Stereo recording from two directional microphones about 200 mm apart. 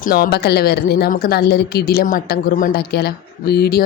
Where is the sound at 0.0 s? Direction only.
45° left (ahead or behind).